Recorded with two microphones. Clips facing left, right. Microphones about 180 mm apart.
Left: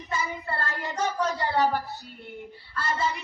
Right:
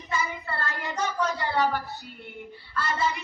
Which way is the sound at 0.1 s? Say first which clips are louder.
Even; 40° left (ahead or behind).